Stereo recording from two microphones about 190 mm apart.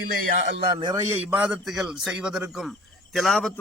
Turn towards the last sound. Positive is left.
turn(degrees=0)  # may be behind; listen again after turning